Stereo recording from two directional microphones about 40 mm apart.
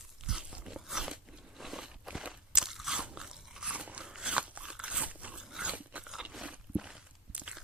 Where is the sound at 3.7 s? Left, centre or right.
Right.